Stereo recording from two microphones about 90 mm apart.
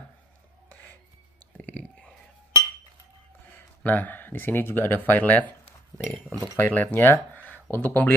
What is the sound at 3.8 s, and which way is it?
Speech, 20° left (ahead or behind).